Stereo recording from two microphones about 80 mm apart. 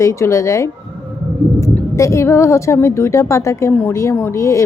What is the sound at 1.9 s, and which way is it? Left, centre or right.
A woman's voice, left.